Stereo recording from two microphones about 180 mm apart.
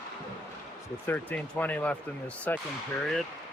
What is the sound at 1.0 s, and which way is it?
Speech, 10° left (ahead or behind).